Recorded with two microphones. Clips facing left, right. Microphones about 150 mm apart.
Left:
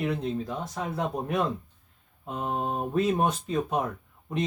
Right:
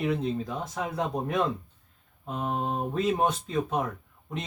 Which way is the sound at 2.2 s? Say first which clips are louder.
Even; 20° left (ahead or behind).